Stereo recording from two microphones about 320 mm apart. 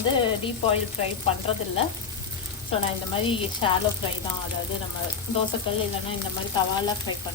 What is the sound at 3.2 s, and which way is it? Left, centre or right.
Chopping, centre.